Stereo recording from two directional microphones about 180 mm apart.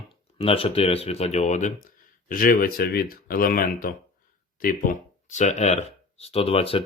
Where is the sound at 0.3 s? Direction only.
30° left (ahead or behind).